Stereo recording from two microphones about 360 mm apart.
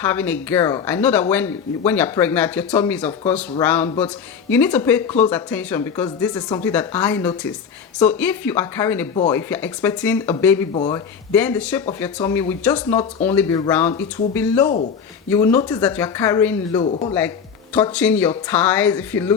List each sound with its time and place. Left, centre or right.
0.0 s speech: centre
16.8 s speech: centre
17.7 s speech: centre